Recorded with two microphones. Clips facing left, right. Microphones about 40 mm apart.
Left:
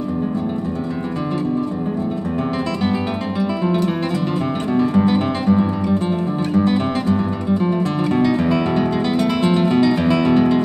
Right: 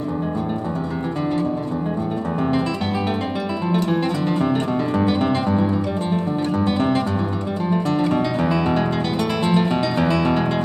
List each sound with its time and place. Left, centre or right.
4.7 s music: centre
6.7 s guitar: centre
8.2 s music: centre